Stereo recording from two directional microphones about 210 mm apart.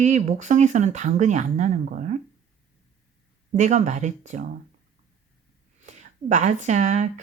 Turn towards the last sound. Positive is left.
turn(degrees=-35)  # may be behind; listen again after turning